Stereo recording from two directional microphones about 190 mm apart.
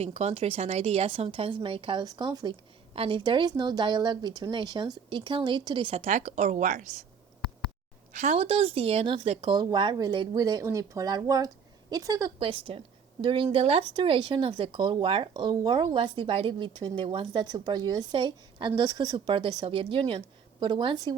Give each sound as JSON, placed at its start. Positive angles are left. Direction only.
{"t": 0.0, "sound": "speech", "side_deg": -35}
{"t": 8.1, "sound": "speech", "side_deg": -35}